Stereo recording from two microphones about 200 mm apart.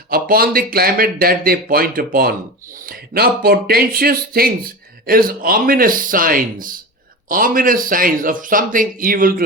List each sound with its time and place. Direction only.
0.1 s speech: 45° right (ahead or behind)